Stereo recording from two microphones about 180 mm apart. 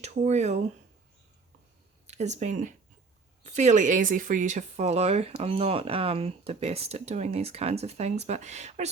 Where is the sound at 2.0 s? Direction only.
40° right (ahead or behind).